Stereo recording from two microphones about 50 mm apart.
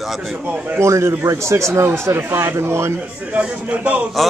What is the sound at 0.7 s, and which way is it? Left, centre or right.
A man's voice, right.